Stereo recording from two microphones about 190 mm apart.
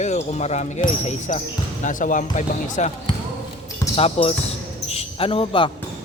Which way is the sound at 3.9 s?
30° left (ahead or behind).